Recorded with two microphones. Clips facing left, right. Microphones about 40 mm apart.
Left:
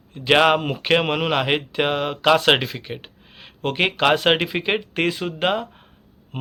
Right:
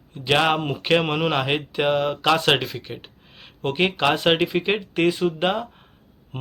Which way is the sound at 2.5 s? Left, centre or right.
Left.